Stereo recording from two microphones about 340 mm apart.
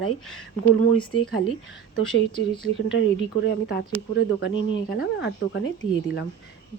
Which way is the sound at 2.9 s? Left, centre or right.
Left.